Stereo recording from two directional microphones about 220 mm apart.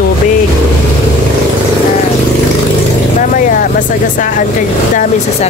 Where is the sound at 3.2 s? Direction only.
35° left (ahead or behind).